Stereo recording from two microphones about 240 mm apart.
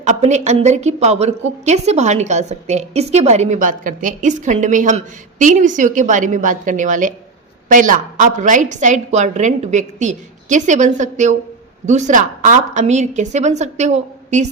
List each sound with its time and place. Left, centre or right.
0.0 s a woman's voice: right